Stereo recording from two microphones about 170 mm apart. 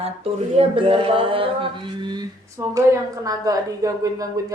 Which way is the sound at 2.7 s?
20° right (ahead or behind).